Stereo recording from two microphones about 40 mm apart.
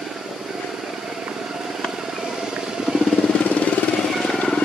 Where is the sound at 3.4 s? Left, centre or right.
Left.